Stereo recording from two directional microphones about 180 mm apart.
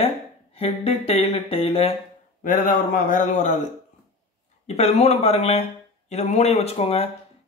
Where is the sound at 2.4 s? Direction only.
50° left (ahead or behind).